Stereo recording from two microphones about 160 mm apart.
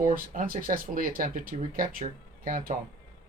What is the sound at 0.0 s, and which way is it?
Speech, 60° right (ahead or behind).